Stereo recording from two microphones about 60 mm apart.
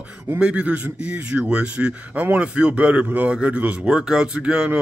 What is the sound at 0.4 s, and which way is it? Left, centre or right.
Speech, centre.